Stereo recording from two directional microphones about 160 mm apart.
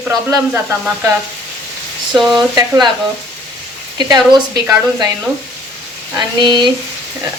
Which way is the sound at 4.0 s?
25° right (ahead or behind).